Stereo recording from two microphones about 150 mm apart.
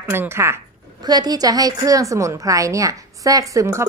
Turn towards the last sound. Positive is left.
turn(degrees=-20)  # may be behind; listen again after turning